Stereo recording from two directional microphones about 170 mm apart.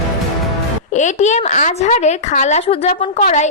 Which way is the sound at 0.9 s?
45° left (ahead or behind).